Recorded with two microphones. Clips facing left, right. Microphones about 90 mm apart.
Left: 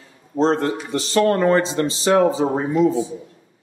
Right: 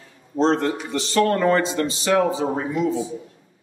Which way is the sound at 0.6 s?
30° left (ahead or behind).